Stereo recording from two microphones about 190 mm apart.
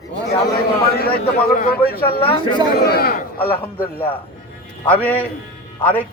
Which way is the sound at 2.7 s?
55° left (ahead or behind).